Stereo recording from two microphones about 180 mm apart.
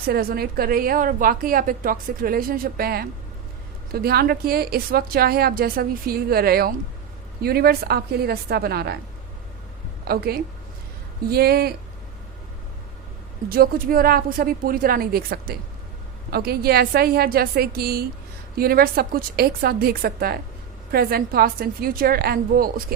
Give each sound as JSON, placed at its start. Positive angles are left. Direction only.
{"t": 0.1, "sound": "a woman's voice", "side_deg": -55}
{"t": 10.1, "sound": "a woman's voice", "side_deg": -60}
{"t": 13.5, "sound": "a woman's voice", "side_deg": -55}